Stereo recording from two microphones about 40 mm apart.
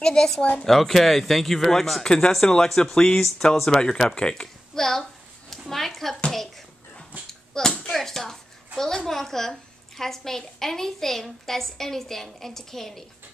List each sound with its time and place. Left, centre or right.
0.0 s a woman's voice: centre
0.7 s a woman's voice: centre
5.5 s a sound: centre
7.1 s dog: right
7.5 s a sound: centre
8.7 s a woman's voice: centre